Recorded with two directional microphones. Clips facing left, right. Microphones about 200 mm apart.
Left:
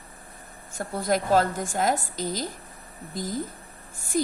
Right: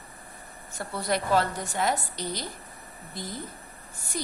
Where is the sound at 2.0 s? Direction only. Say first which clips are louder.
Left 4 dB; 90° left.